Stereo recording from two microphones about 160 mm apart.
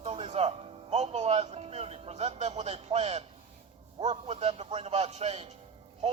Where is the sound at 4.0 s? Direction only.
40° right (ahead or behind).